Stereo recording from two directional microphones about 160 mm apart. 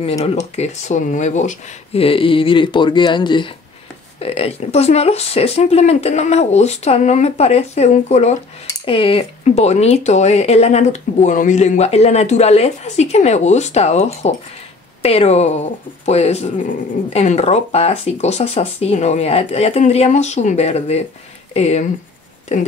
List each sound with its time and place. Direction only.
0.2 s speech: 40° left (ahead or behind)
2.0 s speech: 35° left (ahead or behind)